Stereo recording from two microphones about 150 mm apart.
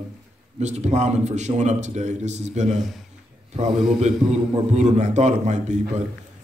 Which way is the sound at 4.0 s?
50° right (ahead or behind).